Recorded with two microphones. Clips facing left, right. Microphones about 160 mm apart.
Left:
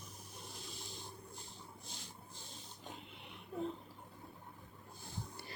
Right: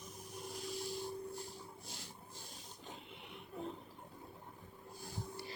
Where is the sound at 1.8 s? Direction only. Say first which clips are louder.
Right 2 dB; 20° left (ahead or behind).